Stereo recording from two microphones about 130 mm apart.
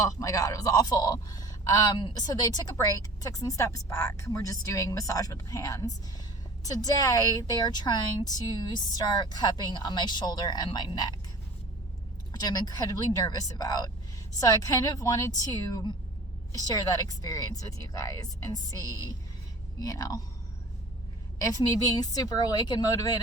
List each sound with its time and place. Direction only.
0.0 s a woman's voice: 25° left (ahead or behind)
12.3 s speech: 30° left (ahead or behind)
21.4 s speech: 30° left (ahead or behind)